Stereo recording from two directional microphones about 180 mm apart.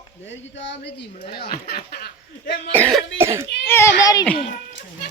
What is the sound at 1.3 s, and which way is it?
Speech, 60° left (ahead or behind).